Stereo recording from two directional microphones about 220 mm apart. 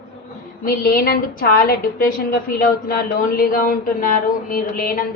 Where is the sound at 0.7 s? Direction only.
40° left (ahead or behind).